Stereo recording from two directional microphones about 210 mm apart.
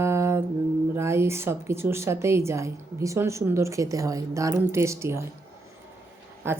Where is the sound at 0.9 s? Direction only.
10° right (ahead or behind).